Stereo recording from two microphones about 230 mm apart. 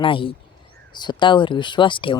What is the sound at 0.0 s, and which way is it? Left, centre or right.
Speech, left.